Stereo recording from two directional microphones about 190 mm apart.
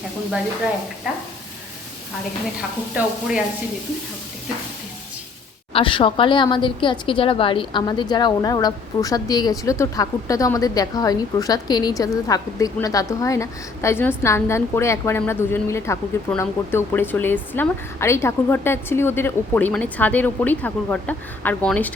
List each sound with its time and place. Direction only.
2.6 s speech: 5° right (ahead or behind)
5.7 s a woman's voice: 25° left (ahead or behind); by 21.9 s 5° left (ahead or behind)